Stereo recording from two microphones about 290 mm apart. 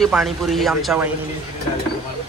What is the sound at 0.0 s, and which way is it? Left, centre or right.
Speech, centre.